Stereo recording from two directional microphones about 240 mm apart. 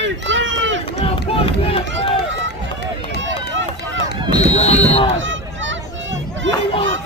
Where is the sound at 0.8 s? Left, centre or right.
Left.